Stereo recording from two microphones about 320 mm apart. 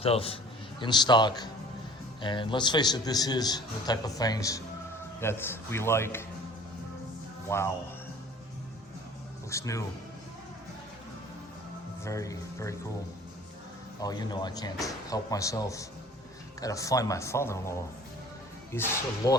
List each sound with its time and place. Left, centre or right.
0.0 s a man's voice: centre
7.5 s a man's voice: centre
9.5 s a man's voice: centre
12.0 s a man's voice: centre
14.0 s a man's voice: centre